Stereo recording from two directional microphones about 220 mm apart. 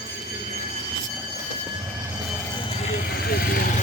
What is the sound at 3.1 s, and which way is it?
Vehicle, 45° left (ahead or behind).